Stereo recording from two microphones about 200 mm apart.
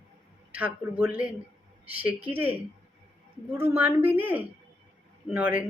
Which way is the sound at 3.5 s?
10° right (ahead or behind).